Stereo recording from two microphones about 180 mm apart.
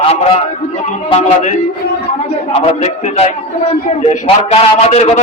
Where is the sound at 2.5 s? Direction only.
35° left (ahead or behind).